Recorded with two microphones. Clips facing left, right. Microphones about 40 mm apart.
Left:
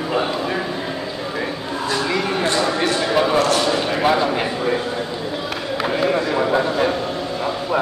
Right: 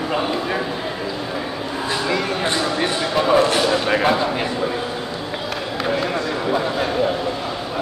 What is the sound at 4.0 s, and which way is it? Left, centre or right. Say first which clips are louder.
Speech: left 1 dB; centre.